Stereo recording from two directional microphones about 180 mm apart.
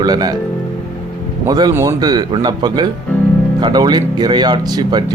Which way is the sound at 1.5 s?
20° right (ahead or behind).